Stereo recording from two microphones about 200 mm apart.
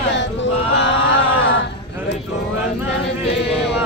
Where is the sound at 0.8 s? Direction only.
65° left (ahead or behind).